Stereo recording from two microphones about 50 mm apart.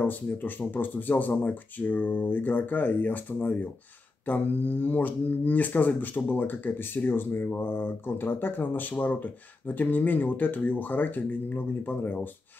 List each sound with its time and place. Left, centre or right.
0.0 s speech: left